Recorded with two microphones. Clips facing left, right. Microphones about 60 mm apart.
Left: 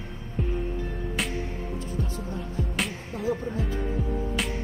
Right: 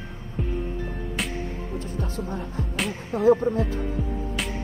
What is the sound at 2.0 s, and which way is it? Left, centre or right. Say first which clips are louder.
Speech: right 2 dB; right.